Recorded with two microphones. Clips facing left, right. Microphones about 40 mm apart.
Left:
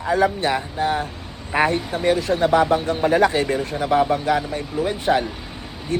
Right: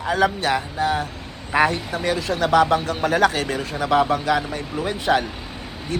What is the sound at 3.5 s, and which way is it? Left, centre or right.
Speech, right.